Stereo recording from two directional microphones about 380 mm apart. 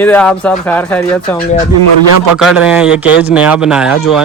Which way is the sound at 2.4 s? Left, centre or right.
Centre.